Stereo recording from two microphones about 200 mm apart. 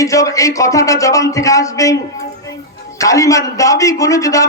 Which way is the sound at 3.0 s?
15° left (ahead or behind).